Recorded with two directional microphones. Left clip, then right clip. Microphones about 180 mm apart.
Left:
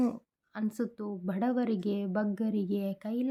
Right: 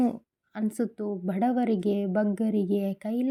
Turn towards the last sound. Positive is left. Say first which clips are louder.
# right 5 dB
turn(degrees=-15)  # may be behind; listen again after turning